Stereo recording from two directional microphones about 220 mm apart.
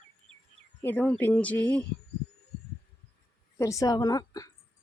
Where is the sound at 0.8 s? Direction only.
10° left (ahead or behind).